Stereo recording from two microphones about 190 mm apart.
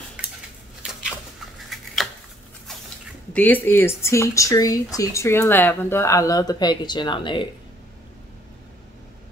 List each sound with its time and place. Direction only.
3.3 s speech: 10° left (ahead or behind); by 7.4 s 25° left (ahead or behind)